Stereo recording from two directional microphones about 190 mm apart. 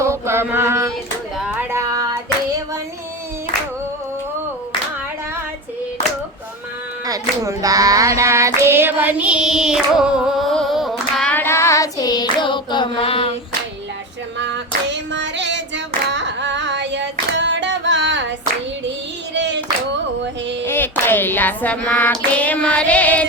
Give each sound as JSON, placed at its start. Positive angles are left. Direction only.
{"t": 0.0, "sound": "mantra", "side_deg": -15}
{"t": 1.4, "sound": "child singing", "side_deg": -10}
{"t": 7.0, "sound": "child singing", "side_deg": -20}
{"t": 14.8, "sound": "female singing", "side_deg": -70}
{"t": 16.1, "sound": "singing", "side_deg": -70}
{"t": 19.3, "sound": "child singing", "side_deg": -70}
{"t": 20.7, "sound": "a sound", "side_deg": 10}
{"t": 21.0, "sound": "child singing", "side_deg": 10}